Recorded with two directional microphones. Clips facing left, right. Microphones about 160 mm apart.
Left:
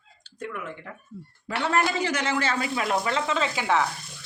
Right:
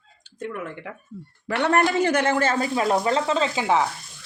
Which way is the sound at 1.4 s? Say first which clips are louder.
Right 4 dB; 65° right (ahead or behind).